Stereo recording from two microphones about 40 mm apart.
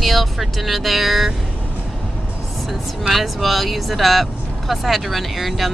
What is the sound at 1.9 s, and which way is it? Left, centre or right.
Vehicle, centre.